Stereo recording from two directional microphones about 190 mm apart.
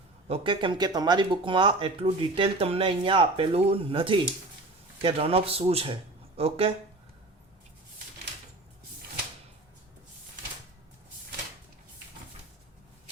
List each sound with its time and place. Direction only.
0.3 s speech: 30° right (ahead or behind)